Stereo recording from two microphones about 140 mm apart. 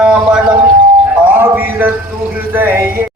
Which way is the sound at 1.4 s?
15° right (ahead or behind).